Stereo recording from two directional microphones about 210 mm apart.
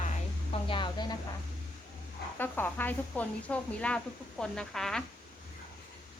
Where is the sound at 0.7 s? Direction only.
20° left (ahead or behind).